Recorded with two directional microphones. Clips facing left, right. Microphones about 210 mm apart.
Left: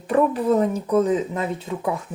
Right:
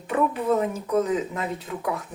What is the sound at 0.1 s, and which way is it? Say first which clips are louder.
Speech: left 4 dB; 35° left (ahead or behind).